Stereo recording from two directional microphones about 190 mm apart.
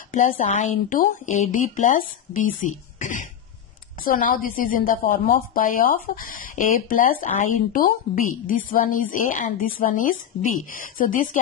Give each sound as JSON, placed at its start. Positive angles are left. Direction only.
{"t": 0.1, "sound": "a woman's voice", "side_deg": 45}